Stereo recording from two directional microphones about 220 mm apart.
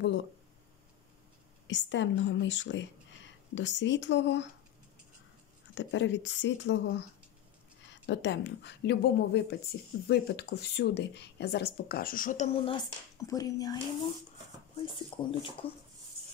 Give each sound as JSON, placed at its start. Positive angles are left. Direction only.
{"t": 1.7, "sound": "speech", "side_deg": 55}
{"t": 5.8, "sound": "speech", "side_deg": 55}